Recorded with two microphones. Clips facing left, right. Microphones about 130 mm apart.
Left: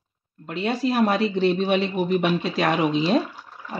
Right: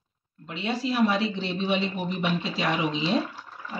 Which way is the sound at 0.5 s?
50° left (ahead or behind).